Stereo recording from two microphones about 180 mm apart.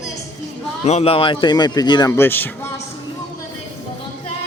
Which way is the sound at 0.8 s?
35° left (ahead or behind).